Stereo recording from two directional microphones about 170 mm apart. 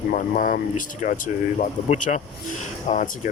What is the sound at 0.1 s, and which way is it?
Speech, 50° left (ahead or behind).